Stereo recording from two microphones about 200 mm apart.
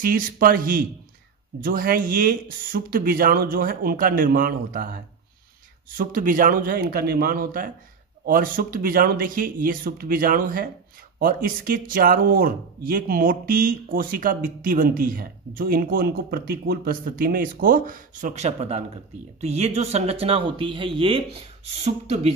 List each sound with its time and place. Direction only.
0.0 s speech: 45° right (ahead or behind)